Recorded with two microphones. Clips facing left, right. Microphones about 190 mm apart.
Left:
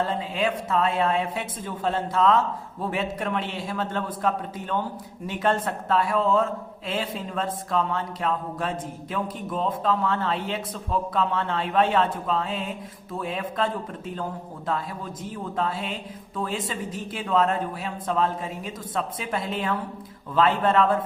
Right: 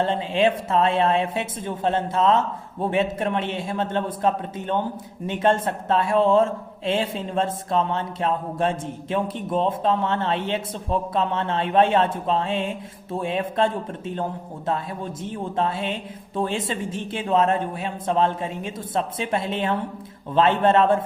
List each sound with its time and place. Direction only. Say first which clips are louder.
0.0 s a man's voice: right 5 dB; 25° right (ahead or behind)